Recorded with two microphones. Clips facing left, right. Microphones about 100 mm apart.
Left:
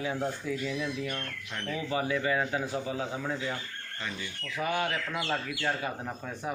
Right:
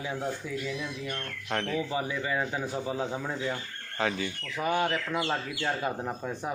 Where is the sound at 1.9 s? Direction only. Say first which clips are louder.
Left 2 dB; 20° right (ahead or behind).